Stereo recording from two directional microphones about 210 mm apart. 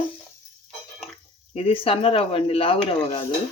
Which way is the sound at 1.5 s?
25° left (ahead or behind).